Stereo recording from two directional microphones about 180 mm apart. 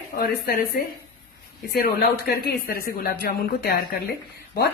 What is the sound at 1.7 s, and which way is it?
A woman's voice, 60° left (ahead or behind).